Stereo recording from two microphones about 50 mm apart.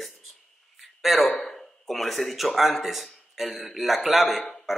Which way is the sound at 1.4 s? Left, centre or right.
Centre.